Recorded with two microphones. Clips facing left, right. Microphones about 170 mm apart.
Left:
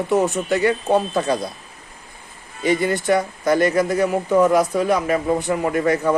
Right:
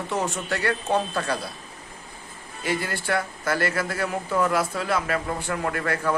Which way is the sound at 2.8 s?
20° left (ahead or behind).